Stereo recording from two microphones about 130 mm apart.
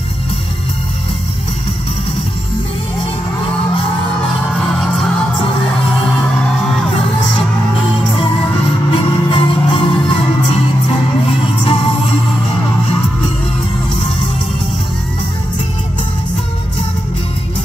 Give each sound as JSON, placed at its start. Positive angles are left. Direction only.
{"t": 4.6, "sound": "music", "side_deg": 0}
{"t": 8.9, "sound": "music", "side_deg": 40}